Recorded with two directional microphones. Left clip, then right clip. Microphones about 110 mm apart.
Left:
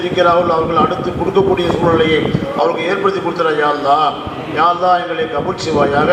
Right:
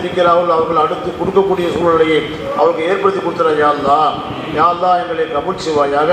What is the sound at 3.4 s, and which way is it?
A man's voice, 40° left (ahead or behind).